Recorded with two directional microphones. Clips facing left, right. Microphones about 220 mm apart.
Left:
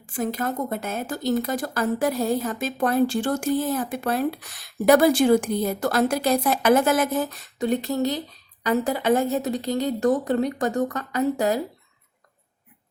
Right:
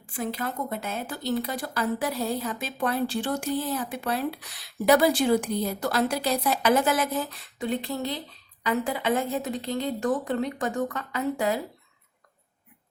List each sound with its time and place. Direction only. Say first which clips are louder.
0.0 s a woman's voice: left 4 dB; 45° left (ahead or behind)